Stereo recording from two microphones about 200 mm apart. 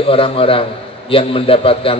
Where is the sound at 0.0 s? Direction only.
30° left (ahead or behind).